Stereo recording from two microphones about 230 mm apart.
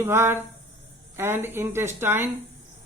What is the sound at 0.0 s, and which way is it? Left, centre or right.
A man's voice, centre.